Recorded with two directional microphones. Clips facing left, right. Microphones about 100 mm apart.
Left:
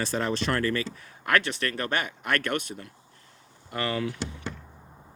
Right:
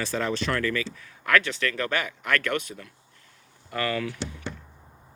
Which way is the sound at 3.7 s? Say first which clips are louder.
Right 1 dB; 25° left (ahead or behind).